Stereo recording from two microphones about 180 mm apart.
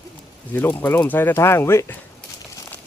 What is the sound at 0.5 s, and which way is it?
Speech, 10° left (ahead or behind).